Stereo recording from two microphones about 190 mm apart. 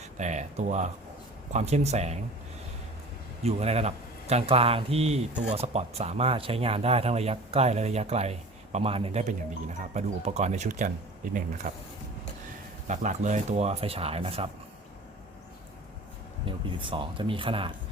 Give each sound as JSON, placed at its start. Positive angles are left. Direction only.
{"t": 0.0, "sound": "speech", "side_deg": -40}
{"t": 3.4, "sound": "speech", "side_deg": -35}
{"t": 12.9, "sound": "speech", "side_deg": -40}
{"t": 16.5, "sound": "speech", "side_deg": -25}